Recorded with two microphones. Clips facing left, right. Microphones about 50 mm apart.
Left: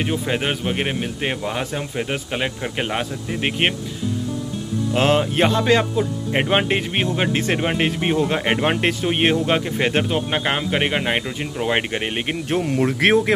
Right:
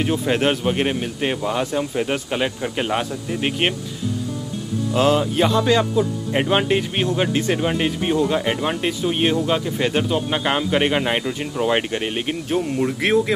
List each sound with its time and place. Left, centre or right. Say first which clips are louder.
0.0 s speech: right 3 dB; centre
4.9 s a man's voice: even; left
12.6 s speech: left 3 dB; left